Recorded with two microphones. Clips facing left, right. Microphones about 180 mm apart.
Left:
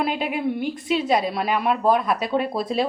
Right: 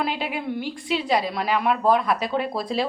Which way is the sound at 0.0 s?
20° left (ahead or behind).